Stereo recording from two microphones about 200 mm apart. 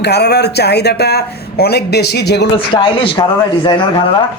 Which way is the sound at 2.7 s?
25° left (ahead or behind).